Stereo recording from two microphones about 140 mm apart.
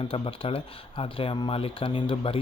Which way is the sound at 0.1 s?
40° left (ahead or behind).